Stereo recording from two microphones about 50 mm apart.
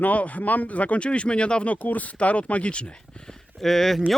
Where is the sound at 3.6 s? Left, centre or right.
Centre.